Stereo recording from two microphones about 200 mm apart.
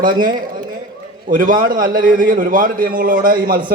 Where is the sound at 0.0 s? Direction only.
45° right (ahead or behind).